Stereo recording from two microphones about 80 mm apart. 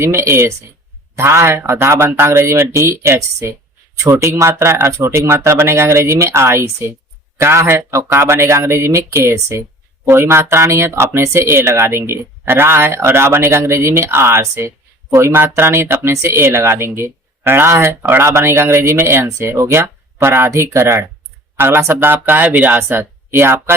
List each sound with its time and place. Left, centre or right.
0.0 s speech: right